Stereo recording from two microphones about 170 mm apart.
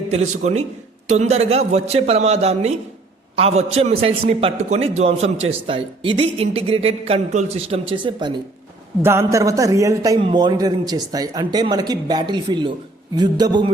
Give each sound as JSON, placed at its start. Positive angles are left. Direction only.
{"t": 0.1, "sound": "a man's voice", "side_deg": -40}
{"t": 9.0, "sound": "speech", "side_deg": -15}